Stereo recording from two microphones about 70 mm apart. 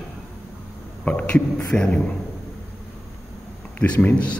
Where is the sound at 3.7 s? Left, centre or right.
Centre.